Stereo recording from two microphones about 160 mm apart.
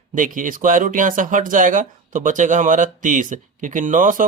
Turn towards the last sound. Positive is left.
turn(degrees=-55)  # may be behind; listen again after turning